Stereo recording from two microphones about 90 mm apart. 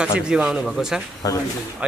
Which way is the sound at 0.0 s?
10° right (ahead or behind).